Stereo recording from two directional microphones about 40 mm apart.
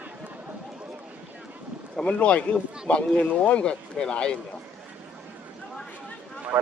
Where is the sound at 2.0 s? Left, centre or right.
Left.